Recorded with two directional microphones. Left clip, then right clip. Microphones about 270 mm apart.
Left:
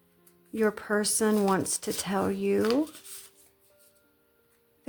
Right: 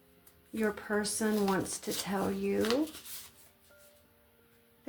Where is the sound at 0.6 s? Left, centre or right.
Left.